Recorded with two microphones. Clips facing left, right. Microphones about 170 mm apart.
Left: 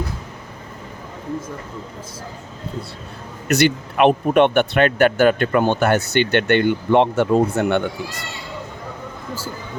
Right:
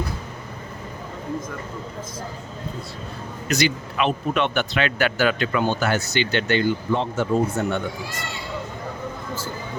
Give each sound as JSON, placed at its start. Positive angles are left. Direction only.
{"t": 3.5, "sound": "speech", "side_deg": 60}